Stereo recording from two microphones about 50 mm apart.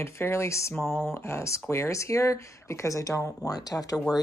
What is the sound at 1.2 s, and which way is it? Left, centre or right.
Speech, left.